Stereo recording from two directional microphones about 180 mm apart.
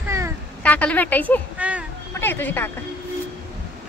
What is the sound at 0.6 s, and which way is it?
Speech, 10° left (ahead or behind).